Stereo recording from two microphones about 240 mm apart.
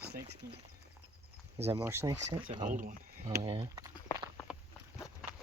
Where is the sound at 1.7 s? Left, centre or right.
Centre.